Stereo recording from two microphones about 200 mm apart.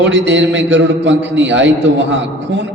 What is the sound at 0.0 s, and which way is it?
A man's voice, 65° right (ahead or behind).